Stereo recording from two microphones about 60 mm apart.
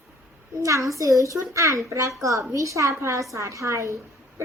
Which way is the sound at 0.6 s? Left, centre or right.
Right.